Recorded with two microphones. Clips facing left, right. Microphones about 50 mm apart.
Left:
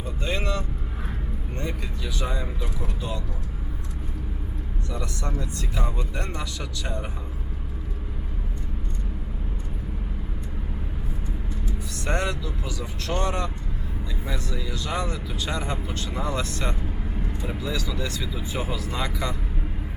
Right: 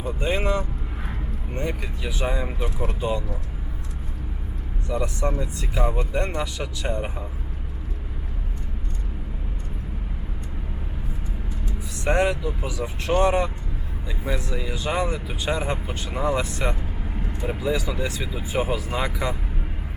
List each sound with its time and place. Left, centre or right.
0.0 s vehicle: centre
1.5 s speech: right
4.9 s speech: centre
12.0 s speech: centre